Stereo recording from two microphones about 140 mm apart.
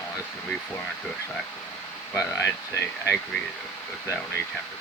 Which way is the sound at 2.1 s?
20° left (ahead or behind).